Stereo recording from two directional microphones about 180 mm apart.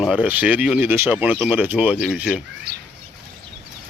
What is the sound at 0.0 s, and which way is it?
Speech, 5° right (ahead or behind).